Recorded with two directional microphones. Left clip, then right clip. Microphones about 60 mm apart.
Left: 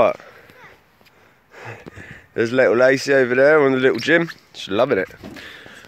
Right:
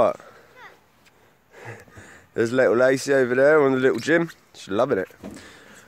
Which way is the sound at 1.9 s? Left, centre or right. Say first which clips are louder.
Left 6 dB; right.